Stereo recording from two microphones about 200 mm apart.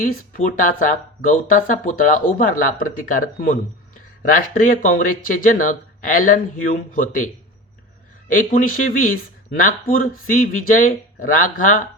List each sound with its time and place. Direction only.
0.0 s speech: 40° left (ahead or behind)
8.3 s speech: 45° left (ahead or behind)